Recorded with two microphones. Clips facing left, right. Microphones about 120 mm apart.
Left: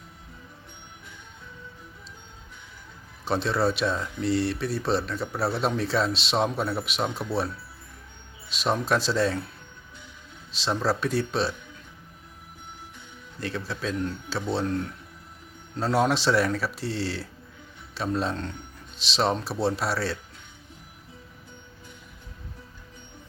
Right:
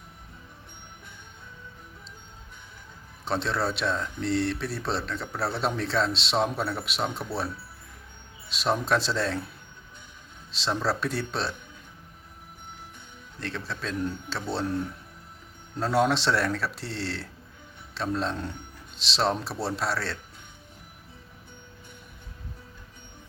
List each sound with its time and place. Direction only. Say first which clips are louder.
3.2 s speech: left 3 dB; centre (ahead or behind)
10.5 s speech: left 2 dB; centre (ahead or behind)
13.4 s speech: left 3 dB; centre (ahead or behind)